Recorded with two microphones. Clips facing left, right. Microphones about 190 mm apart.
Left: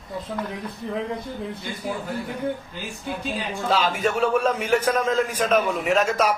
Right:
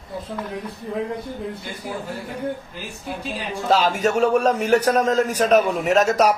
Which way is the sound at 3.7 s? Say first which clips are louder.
Right 4 dB; 40° right (ahead or behind).